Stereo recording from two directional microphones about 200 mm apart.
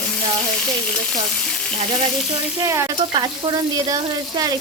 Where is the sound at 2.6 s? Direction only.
15° right (ahead or behind).